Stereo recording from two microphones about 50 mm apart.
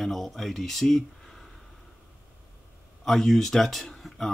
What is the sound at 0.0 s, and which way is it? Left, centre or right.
Speech, centre.